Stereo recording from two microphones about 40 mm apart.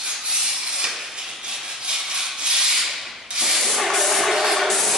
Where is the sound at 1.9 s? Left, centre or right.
Centre.